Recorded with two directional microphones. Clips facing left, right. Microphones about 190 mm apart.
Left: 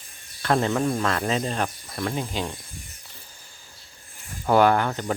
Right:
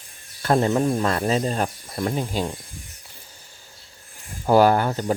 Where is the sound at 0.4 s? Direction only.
35° right (ahead or behind).